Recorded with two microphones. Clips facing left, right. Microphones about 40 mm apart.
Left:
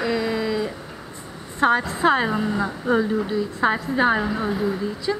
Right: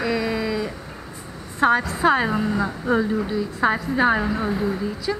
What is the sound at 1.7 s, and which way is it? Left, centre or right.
Speech, left.